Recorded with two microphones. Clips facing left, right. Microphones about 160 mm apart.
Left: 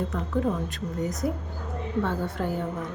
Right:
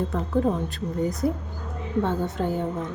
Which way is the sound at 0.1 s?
35° right (ahead or behind).